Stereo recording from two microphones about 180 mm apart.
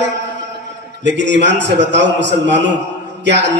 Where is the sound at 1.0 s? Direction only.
75° right (ahead or behind).